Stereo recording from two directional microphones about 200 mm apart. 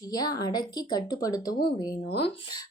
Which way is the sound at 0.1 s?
20° left (ahead or behind).